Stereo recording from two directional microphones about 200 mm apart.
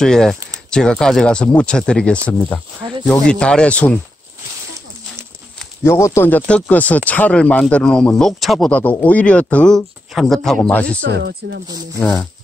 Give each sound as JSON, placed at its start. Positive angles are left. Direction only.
{"t": 0.0, "sound": "speech", "side_deg": 5}
{"t": 5.9, "sound": "speech", "side_deg": 15}
{"t": 11.0, "sound": "speech", "side_deg": -55}
{"t": 12.0, "sound": "speech", "side_deg": 5}